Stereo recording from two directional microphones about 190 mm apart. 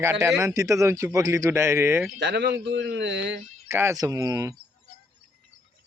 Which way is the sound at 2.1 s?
65° right (ahead or behind).